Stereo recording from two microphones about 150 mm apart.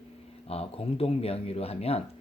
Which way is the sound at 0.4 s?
40° left (ahead or behind).